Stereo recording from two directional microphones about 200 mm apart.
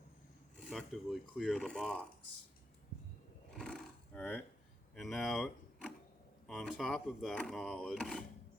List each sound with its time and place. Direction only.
0.6 s speech: centre (ahead or behind)
3.5 s roar: 5° left (ahead or behind)
4.9 s speech: centre (ahead or behind)